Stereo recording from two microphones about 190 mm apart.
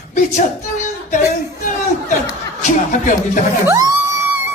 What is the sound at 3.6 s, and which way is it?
Music, 15° right (ahead or behind).